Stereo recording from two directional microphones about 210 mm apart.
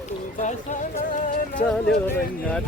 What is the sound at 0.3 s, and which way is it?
Music, 35° left (ahead or behind).